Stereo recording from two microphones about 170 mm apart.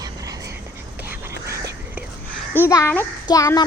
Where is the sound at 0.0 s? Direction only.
20° right (ahead or behind).